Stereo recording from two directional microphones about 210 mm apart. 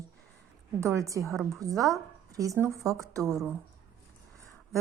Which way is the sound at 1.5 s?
15° right (ahead or behind).